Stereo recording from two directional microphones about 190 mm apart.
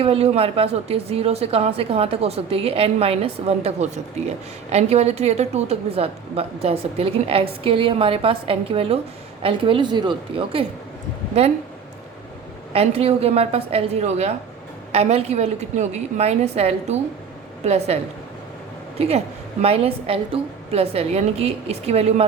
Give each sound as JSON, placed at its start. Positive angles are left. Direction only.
{"t": 0.0, "sound": "a woman's voice", "side_deg": -30}
{"t": 12.7, "sound": "a woman's voice", "side_deg": -30}